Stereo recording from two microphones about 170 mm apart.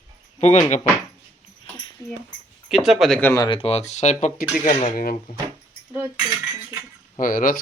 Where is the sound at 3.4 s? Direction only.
35° left (ahead or behind); by 5.3 s 55° left (ahead or behind).